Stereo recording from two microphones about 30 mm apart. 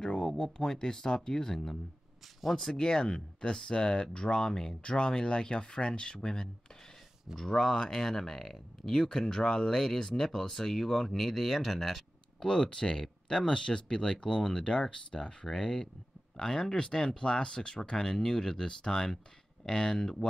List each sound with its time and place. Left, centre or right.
0.2 s a sound: centre
0.7 s speech: left
7.3 s speech: centre
12.4 s speech: left
16.4 s speech: centre